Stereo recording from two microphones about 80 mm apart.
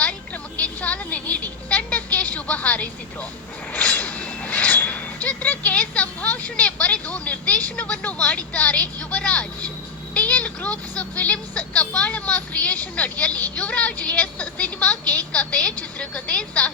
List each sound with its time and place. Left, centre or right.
0.0 s a sound: centre
3.7 s vehicle: centre
10.2 s a woman's voice: centre